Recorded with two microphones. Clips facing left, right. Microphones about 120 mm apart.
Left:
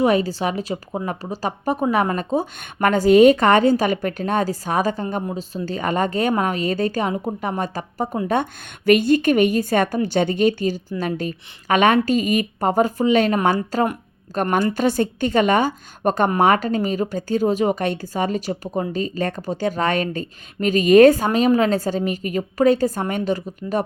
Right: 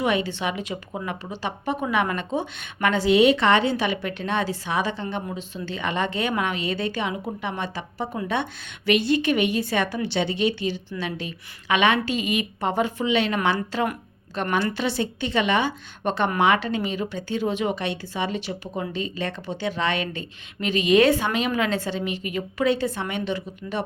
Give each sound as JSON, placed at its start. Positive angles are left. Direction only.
{"t": 0.0, "sound": "a woman's voice", "side_deg": 40}